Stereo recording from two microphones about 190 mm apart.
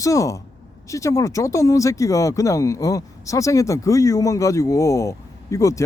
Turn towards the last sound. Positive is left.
turn(degrees=15)  # may be behind; listen again after turning